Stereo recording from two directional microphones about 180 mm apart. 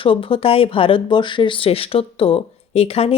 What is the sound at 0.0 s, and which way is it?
Speech, 30° left (ahead or behind).